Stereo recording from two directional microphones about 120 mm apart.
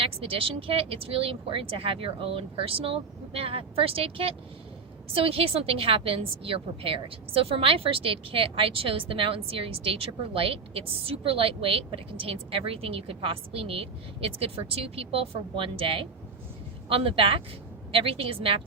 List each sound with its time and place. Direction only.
0.0 s a woman's voice: 50° right (ahead or behind)